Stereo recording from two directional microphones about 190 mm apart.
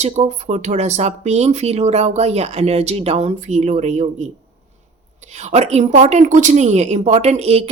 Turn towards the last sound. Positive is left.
turn(degrees=-35)  # may be behind; listen again after turning